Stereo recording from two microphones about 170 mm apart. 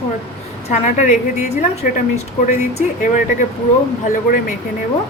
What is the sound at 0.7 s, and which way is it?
Speech, 45° left (ahead or behind).